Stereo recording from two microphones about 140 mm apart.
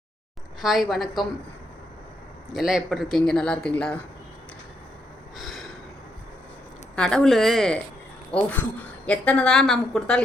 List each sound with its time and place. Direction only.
0.6 s speech: centre (ahead or behind)
2.5 s speech: centre (ahead or behind)
5.4 s gasp: centre (ahead or behind)
6.9 s speech: 5° left (ahead or behind)